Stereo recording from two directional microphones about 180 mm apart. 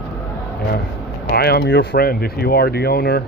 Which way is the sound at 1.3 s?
60° left (ahead or behind).